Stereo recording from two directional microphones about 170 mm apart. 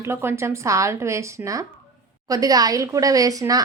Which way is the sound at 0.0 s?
15° right (ahead or behind).